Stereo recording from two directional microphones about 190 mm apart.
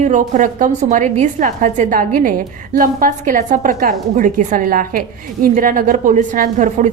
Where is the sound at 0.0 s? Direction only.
40° right (ahead or behind).